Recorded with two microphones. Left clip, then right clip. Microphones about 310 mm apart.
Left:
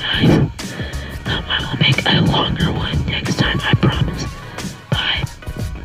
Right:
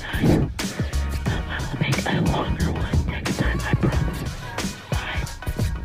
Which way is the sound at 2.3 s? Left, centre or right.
Left.